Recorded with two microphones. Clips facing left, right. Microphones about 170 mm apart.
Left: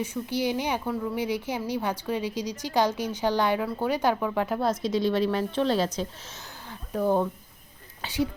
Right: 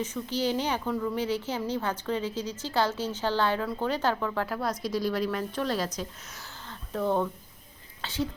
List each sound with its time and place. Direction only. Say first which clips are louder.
0.0 s a woman's voice: left 1 dB; 10° left (ahead or behind); by 6.4 s 25° left (ahead or behind)
6.7 s a sound: left 3 dB; 10° left (ahead or behind)
8.0 s a woman's voice: left 4 dB; 15° left (ahead or behind)